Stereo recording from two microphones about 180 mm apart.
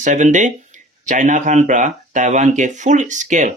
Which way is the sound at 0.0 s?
45° right (ahead or behind).